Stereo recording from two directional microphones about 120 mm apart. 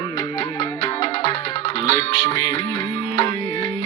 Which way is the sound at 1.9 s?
35° left (ahead or behind).